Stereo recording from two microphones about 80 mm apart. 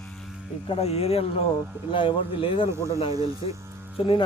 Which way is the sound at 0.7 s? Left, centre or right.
Left.